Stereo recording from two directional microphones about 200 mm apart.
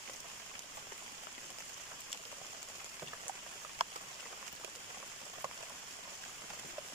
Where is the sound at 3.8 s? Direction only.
30° right (ahead or behind).